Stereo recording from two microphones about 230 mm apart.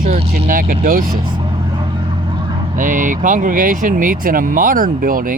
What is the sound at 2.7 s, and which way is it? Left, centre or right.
Speech, right.